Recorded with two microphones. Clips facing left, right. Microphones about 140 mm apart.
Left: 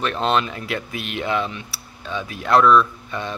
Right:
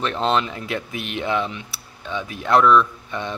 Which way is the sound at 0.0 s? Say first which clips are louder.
Even; 20° right (ahead or behind).